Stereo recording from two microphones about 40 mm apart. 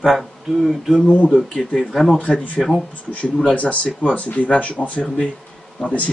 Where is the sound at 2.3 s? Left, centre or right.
Left.